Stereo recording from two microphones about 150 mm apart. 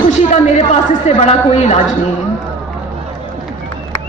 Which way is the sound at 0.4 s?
50° left (ahead or behind).